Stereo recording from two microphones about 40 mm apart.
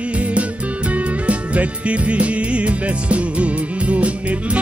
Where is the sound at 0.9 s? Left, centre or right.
Right.